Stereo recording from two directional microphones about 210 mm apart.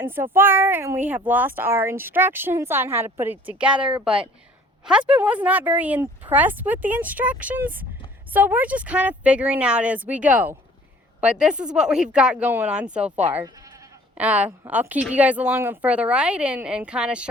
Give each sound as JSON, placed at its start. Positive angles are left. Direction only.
{"t": 0.0, "sound": "speech", "side_deg": -10}